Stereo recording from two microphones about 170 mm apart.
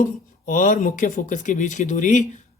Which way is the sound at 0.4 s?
50° left (ahead or behind).